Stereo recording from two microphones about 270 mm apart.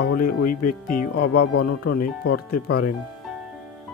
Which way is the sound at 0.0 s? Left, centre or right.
Left.